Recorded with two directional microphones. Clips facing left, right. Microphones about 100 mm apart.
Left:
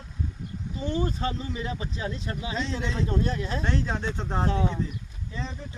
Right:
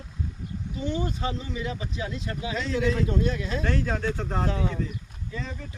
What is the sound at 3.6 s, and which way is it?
Speech, 20° left (ahead or behind).